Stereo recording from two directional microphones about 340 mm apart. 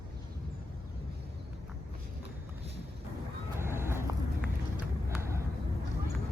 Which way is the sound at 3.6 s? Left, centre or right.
Centre.